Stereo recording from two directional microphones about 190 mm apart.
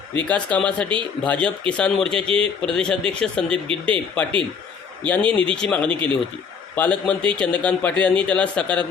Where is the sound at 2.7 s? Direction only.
5° left (ahead or behind).